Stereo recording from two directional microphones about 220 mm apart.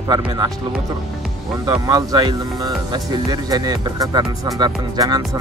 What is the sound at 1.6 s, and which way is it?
Speech, 20° right (ahead or behind).